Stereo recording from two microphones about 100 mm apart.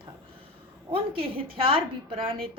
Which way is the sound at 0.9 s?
65° right (ahead or behind).